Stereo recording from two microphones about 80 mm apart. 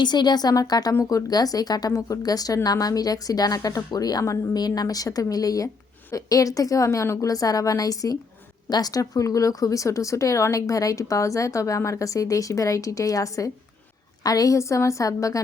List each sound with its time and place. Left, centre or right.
0.0 s speech: left
4.5 s speech: left